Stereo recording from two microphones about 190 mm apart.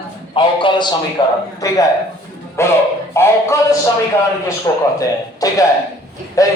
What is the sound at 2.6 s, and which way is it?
Speech, 15° left (ahead or behind).